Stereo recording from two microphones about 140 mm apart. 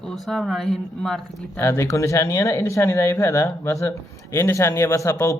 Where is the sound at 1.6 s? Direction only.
20° left (ahead or behind).